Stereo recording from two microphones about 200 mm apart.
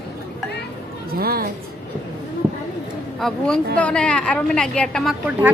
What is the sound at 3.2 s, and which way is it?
A woman's voice, centre (ahead or behind).